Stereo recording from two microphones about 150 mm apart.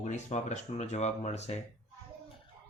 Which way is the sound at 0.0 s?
55° left (ahead or behind).